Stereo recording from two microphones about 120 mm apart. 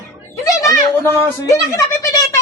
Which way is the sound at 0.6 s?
25° left (ahead or behind).